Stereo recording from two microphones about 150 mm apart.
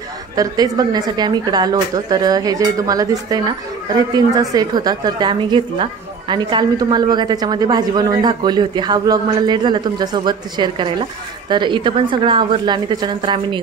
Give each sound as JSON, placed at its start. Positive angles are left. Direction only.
{"t": 0.4, "sound": "a woman's voice", "side_deg": -25}